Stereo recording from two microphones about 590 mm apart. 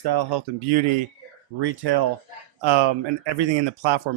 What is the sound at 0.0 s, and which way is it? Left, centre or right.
Speech, right.